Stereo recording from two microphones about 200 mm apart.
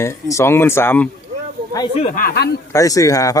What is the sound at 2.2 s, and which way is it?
Speech, 50° left (ahead or behind).